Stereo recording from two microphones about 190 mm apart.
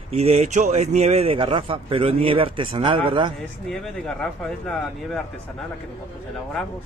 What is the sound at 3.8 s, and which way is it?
Speech, 5° left (ahead or behind).